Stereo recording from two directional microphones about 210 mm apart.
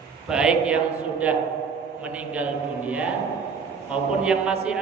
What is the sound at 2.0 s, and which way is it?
A man's voice, 5° right (ahead or behind).